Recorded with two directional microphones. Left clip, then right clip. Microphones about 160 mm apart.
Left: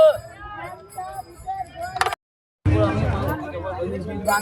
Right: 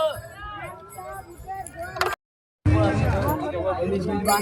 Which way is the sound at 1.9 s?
30° left (ahead or behind).